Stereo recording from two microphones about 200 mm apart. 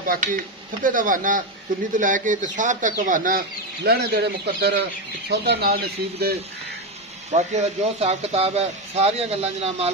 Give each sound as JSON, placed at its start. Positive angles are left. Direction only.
{"t": 0.0, "sound": "speech", "side_deg": -45}
{"t": 7.3, "sound": "speech", "side_deg": -35}